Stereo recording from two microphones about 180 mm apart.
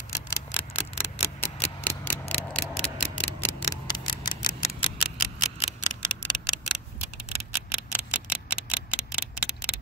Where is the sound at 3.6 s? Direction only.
20° left (ahead or behind).